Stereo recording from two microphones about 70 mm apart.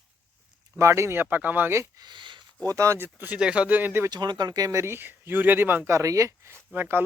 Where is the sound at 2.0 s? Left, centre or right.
Right.